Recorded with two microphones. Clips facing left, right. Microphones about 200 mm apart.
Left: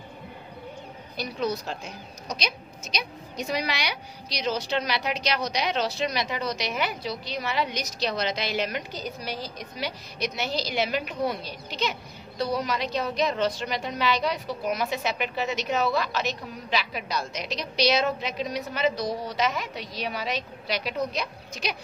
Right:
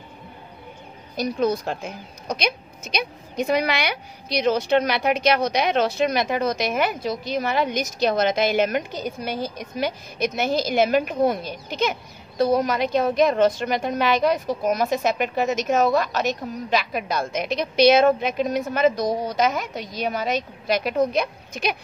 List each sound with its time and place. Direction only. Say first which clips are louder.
1.1 s a woman's voice: right 7 dB; 50° right (ahead or behind)